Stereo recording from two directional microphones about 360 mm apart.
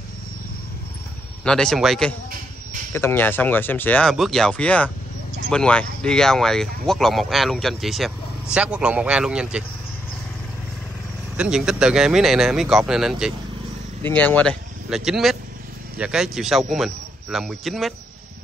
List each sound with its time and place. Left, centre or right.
1.4 s speech: centre
11.3 s speech: centre